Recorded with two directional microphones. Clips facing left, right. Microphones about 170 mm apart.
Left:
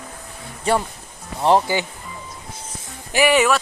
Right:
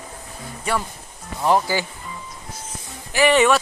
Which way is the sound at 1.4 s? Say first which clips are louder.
Left 2 dB; 25° left (ahead or behind).